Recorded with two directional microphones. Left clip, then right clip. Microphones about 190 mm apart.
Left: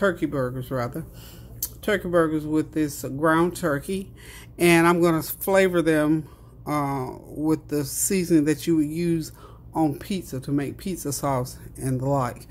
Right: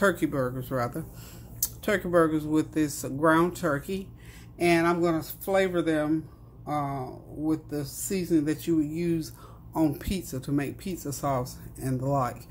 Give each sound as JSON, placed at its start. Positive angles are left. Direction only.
{"t": 0.0, "sound": "speech", "side_deg": 10}
{"t": 4.6, "sound": "speech", "side_deg": 40}